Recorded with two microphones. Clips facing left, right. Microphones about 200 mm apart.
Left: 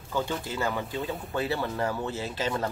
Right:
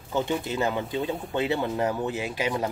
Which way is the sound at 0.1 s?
20° right (ahead or behind).